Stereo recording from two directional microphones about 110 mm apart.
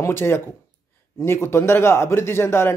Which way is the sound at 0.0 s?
20° left (ahead or behind).